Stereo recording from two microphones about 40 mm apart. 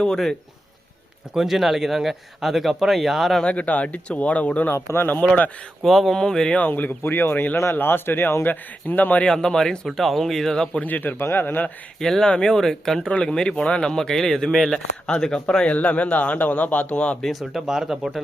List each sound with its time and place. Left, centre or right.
1.3 s speech: centre
3.4 s a man's voice: left
4.7 s speech: left
5.8 s speech: centre
6.6 s speech: left
9.2 s speech: centre
10.8 s speech: left
11.2 s speech: left
11.9 s speech: centre; by 13.9 s left
13.9 s speech: centre
15.6 s a man's voice: left
17.5 s speech: centre